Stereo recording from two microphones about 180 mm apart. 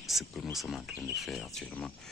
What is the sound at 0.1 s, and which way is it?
Speech, centre (ahead or behind).